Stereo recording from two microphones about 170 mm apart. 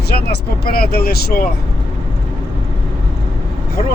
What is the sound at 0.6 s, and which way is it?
Speech, 65° left (ahead or behind).